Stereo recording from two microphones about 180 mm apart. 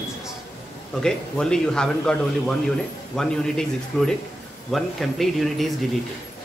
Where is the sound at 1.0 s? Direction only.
5° left (ahead or behind).